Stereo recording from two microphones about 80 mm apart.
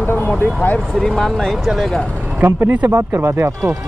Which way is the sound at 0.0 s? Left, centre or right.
Left.